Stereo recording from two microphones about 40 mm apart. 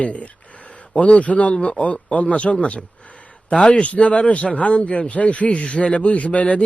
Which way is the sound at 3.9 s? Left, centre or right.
Left.